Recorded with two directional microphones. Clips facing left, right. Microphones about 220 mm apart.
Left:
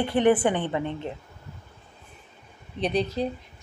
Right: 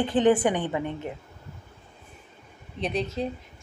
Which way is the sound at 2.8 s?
Centre (ahead or behind).